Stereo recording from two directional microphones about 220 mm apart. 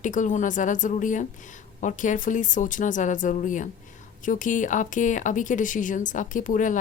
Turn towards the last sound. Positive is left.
turn(degrees=35)  # may be behind; listen again after turning